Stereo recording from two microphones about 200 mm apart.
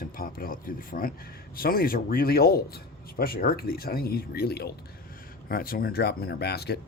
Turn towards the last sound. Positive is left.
turn(degrees=55)  # may be behind; listen again after turning